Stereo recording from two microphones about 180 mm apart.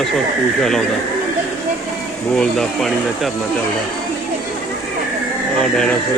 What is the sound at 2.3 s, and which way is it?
Speech, 5° left (ahead or behind).